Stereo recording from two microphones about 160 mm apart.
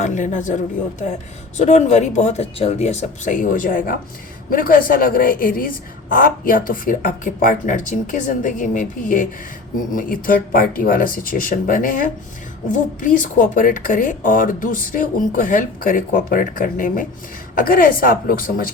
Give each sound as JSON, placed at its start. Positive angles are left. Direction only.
{"t": 0.0, "sound": "a woman's voice", "side_deg": 50}